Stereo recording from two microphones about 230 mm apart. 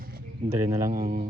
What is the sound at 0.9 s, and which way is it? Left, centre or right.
Speech, right.